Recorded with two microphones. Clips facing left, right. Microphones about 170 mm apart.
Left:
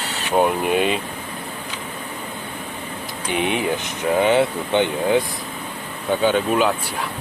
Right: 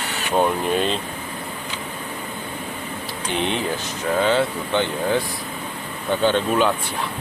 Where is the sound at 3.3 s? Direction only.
10° left (ahead or behind).